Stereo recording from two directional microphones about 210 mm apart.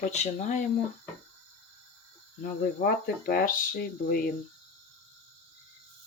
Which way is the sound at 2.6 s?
45° left (ahead or behind).